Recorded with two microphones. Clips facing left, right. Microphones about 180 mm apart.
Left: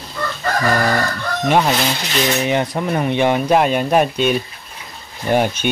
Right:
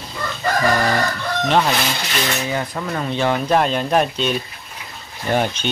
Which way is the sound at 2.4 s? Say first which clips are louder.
Left 5 dB; 20° left (ahead or behind).